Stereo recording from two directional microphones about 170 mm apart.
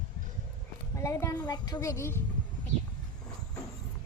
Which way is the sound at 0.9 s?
20° left (ahead or behind).